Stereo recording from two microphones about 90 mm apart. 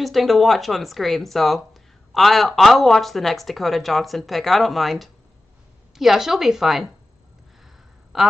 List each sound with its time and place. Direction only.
0.0 s speech: centre (ahead or behind)
8.1 s speech: centre (ahead or behind)